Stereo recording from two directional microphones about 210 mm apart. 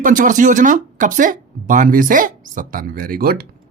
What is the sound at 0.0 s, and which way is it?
Speech, 40° right (ahead or behind).